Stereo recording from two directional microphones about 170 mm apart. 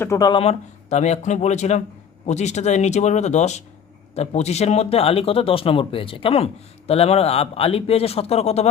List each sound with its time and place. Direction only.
0.0 s speech: 20° left (ahead or behind)
0.4 s speech: 40° left (ahead or behind)